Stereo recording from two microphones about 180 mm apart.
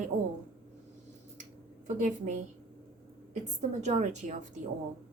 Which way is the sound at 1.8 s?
45° right (ahead or behind).